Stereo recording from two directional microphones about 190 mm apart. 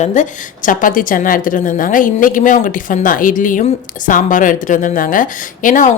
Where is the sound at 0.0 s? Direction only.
40° left (ahead or behind).